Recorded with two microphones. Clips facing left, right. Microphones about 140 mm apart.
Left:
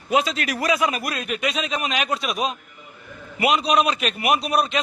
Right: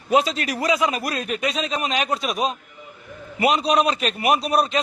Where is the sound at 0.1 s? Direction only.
35° right (ahead or behind).